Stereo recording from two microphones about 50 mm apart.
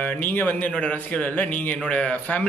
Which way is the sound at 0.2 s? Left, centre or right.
Left.